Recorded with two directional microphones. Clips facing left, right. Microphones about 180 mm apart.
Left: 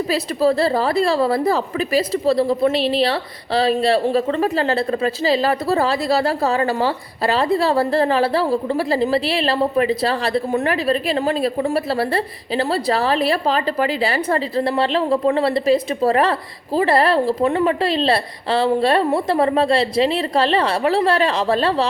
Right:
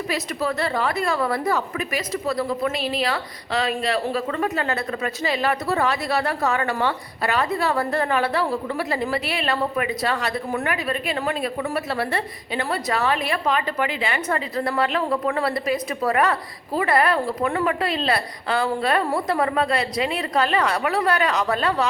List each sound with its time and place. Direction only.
0.1 s a woman's voice: 30° left (ahead or behind)